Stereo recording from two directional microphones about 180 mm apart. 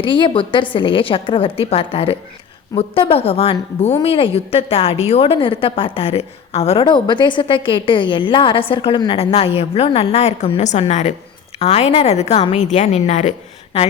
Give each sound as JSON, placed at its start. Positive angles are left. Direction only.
{"t": 0.0, "sound": "a woman's voice", "side_deg": 30}